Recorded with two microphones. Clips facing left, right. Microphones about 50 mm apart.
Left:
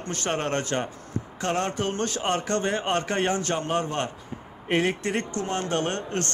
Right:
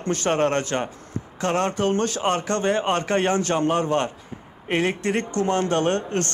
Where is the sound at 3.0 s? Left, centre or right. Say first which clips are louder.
Right 4 dB; right.